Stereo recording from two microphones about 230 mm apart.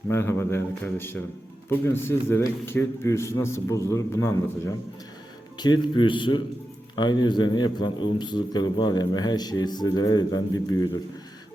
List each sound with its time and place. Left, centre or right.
0.1 s a man's voice: centre